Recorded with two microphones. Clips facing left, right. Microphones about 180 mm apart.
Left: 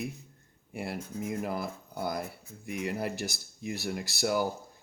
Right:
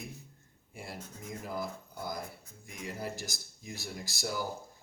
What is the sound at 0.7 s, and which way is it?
Speech, 65° left (ahead or behind).